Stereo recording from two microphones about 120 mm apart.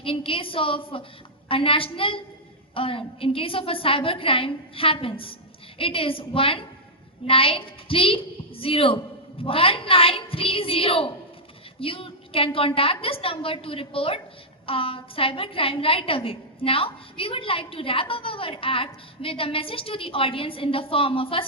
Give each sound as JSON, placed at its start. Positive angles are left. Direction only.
{"t": 0.0, "sound": "a woman's voice", "side_deg": 50}